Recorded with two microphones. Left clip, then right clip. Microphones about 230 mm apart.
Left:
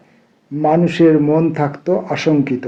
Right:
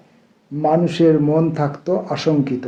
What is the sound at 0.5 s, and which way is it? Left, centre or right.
Speech, left.